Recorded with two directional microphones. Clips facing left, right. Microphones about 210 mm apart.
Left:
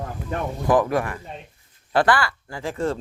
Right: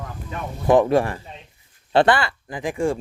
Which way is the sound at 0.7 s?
25° right (ahead or behind).